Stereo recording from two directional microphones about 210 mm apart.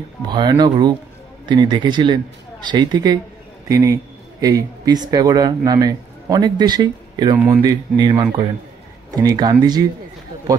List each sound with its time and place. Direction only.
0.3 s speech: 20° right (ahead or behind)